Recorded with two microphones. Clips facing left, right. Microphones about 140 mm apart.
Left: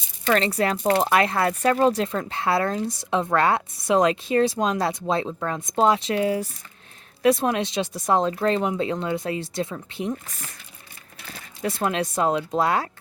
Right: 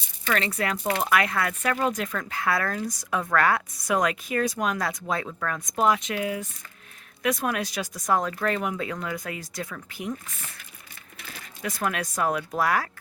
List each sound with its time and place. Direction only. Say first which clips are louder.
0.3 s speech: left 5 dB; 35° left (ahead or behind)
11.6 s speech: left 4 dB; 25° left (ahead or behind)